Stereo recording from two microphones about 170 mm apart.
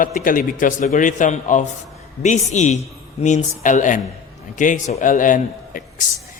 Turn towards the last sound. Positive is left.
turn(degrees=50)  # may be behind; listen again after turning